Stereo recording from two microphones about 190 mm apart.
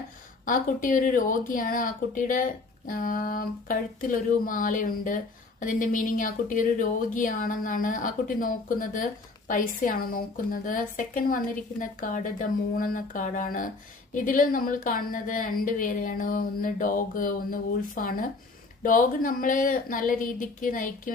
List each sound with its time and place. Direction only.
0.4 s speech: 45° left (ahead or behind)